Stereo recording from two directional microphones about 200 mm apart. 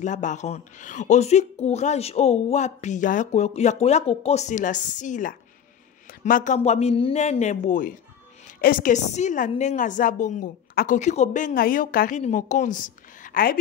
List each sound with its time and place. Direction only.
0.0 s speech: 40° left (ahead or behind)
11.0 s speech: 35° left (ahead or behind)